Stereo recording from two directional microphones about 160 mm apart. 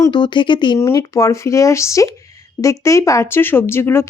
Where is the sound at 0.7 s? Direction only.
20° left (ahead or behind).